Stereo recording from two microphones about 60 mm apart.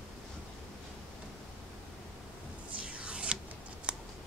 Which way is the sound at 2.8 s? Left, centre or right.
Centre.